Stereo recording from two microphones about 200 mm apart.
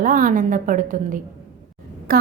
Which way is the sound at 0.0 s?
45° right (ahead or behind).